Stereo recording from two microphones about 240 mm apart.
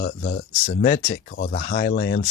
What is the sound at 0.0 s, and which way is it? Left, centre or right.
Speech, left.